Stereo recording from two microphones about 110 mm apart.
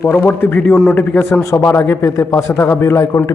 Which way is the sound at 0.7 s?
5° left (ahead or behind).